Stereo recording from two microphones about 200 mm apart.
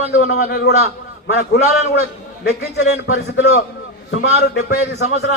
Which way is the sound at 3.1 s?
55° left (ahead or behind).